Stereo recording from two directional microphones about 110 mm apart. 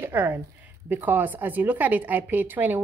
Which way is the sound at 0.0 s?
20° right (ahead or behind).